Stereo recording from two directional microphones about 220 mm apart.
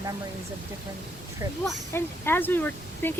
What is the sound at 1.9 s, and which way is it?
Speech, 10° left (ahead or behind).